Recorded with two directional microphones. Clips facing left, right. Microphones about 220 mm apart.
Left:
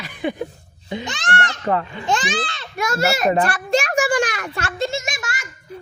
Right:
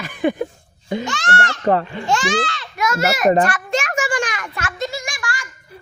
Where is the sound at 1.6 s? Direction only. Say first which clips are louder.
Right 6 dB; 35° right (ahead or behind).